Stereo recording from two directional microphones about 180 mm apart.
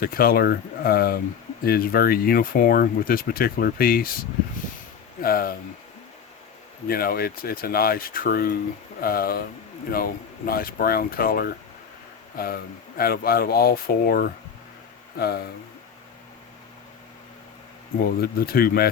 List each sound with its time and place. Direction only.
0.0 s speech: 55° left (ahead or behind)
6.8 s speech: 55° left (ahead or behind)
13.0 s speech: 55° left (ahead or behind)
18.0 s speech: 55° left (ahead or behind)